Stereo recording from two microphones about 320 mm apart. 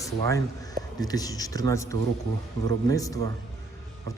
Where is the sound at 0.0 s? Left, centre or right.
Centre.